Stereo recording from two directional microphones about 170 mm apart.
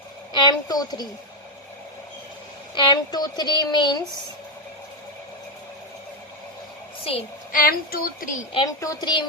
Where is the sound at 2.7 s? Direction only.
25° left (ahead or behind).